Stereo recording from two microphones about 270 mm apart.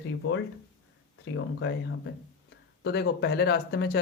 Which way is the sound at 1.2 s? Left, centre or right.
Left.